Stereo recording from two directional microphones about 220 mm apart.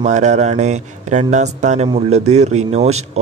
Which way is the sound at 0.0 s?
30° right (ahead or behind).